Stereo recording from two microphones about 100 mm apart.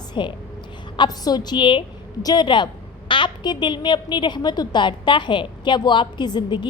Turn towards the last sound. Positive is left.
turn(degrees=50)  # may be behind; listen again after turning